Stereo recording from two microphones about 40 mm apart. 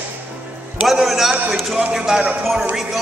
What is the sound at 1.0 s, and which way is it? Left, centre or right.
Speech, centre.